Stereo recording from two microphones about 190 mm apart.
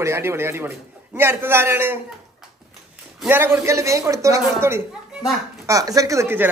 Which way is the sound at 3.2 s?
10° right (ahead or behind).